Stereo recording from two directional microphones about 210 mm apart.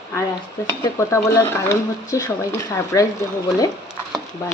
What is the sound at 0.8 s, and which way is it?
Speech, 15° left (ahead or behind).